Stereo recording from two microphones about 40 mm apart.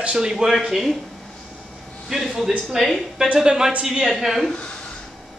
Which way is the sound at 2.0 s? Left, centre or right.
Centre.